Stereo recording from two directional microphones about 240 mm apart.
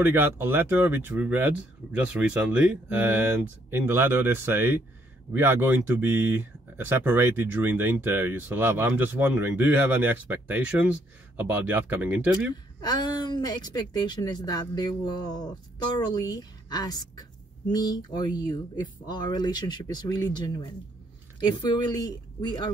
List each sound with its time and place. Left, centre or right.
0.0 s speech: centre
12.8 s speech: centre